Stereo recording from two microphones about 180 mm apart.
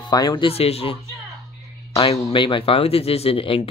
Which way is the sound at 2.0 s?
30° left (ahead or behind).